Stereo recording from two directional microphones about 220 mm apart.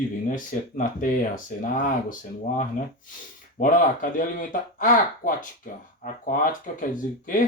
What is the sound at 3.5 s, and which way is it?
Speech, 40° left (ahead or behind).